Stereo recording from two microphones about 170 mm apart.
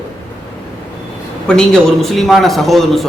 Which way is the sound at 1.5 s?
5° left (ahead or behind).